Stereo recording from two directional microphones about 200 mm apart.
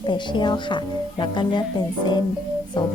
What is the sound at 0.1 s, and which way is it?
A woman's voice, 25° left (ahead or behind).